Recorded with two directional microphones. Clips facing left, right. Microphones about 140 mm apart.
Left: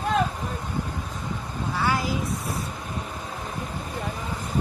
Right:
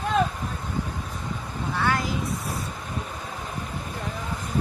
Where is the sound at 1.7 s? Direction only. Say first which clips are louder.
Even; 5° left (ahead or behind).